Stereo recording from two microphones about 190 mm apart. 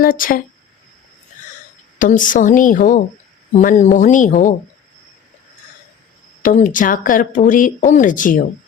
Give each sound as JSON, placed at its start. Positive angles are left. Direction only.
{"t": 0.0, "sound": "speech", "side_deg": 45}
{"t": 2.0, "sound": "speech", "side_deg": 45}
{"t": 6.4, "sound": "speech", "side_deg": 45}